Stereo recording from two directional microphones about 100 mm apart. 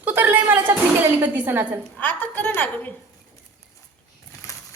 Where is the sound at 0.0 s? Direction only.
20° right (ahead or behind).